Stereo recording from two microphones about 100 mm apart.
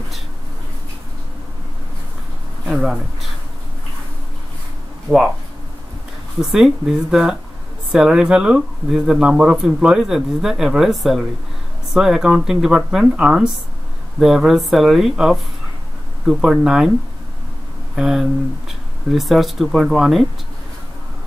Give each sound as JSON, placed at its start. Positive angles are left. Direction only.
{"t": 2.7, "sound": "speech", "side_deg": -5}
{"t": 5.1, "sound": "speech", "side_deg": -20}
{"t": 6.4, "sound": "speech", "side_deg": -5}
{"t": 17.9, "sound": "speech", "side_deg": -5}